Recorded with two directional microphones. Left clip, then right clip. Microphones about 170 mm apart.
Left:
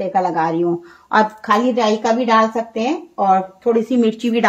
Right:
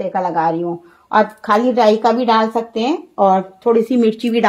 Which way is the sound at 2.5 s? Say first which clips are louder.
Right 2 dB; 35° right (ahead or behind).